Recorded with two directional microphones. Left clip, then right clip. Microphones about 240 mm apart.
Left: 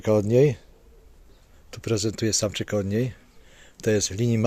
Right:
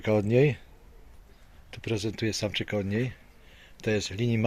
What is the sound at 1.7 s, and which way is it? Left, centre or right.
Speech, left.